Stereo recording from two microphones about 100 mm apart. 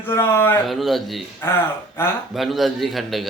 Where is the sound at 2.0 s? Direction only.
25° left (ahead or behind).